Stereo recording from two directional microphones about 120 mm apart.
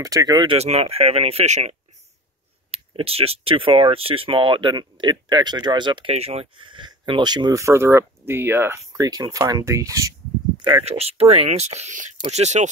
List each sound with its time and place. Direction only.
0.0 s speech: 30° right (ahead or behind)
0.6 s speech: 60° right (ahead or behind)
2.7 s speech: 55° right (ahead or behind)
6.1 s speech: 55° right (ahead or behind); by 10.1 s 25° right (ahead or behind)
10.9 s speech: 60° right (ahead or behind)